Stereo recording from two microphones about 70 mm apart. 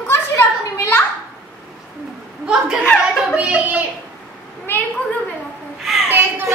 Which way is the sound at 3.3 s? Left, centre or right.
Centre.